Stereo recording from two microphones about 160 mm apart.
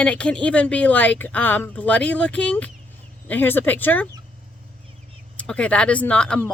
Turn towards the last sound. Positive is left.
turn(degrees=5)  # may be behind; listen again after turning